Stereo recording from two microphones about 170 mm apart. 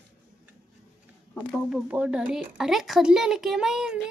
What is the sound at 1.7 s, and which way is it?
Speech, 5° right (ahead or behind).